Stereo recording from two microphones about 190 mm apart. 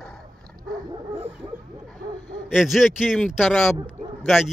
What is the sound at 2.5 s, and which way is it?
Speech, centre (ahead or behind).